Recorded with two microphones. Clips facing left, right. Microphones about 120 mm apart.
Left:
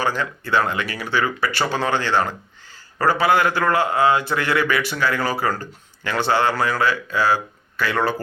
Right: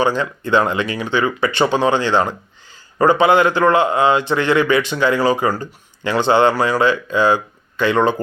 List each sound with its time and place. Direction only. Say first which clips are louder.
0.0 s a man's voice: right 5 dB; 20° right (ahead or behind)